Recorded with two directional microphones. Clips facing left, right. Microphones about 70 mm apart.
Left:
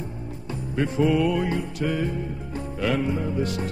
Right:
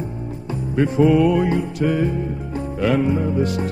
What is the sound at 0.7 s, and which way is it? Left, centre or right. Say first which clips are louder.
Music: right 6 dB; right.